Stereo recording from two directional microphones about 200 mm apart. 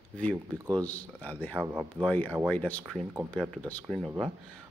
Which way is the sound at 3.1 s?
10° right (ahead or behind).